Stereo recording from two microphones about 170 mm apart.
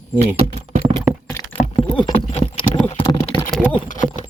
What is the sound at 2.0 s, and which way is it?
Clip-clop, 30° left (ahead or behind).